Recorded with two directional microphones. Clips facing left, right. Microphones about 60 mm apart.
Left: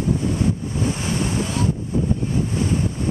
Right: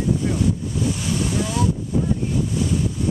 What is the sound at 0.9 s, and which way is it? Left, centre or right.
Waves, left.